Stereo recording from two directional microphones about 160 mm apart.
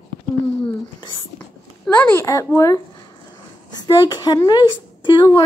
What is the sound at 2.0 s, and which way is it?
A woman's voice, 15° left (ahead or behind).